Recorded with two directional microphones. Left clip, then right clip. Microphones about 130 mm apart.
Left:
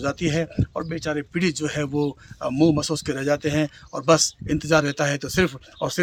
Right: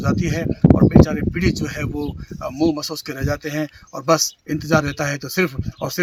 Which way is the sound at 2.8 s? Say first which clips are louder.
Left 1 dB; 10° left (ahead or behind).